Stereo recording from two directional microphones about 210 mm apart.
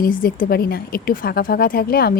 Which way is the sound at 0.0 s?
45° left (ahead or behind).